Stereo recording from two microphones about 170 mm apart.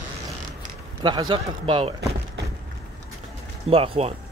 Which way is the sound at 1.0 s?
25° right (ahead or behind).